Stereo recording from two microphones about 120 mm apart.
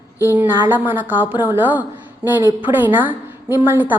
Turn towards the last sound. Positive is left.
turn(degrees=-15)  # may be behind; listen again after turning